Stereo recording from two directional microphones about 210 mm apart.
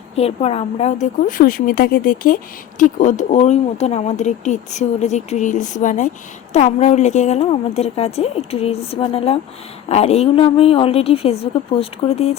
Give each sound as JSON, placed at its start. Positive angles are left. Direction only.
{"t": 0.2, "sound": "a woman's voice", "side_deg": 30}